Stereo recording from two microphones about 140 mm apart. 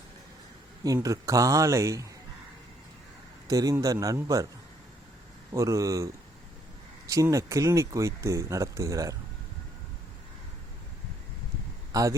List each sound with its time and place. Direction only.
1.0 s speech: 25° right (ahead or behind)
3.4 s speech: 25° right (ahead or behind)
5.5 s speech: 25° right (ahead or behind)
7.1 s speech: 20° right (ahead or behind)
11.9 s a sound: 25° right (ahead or behind)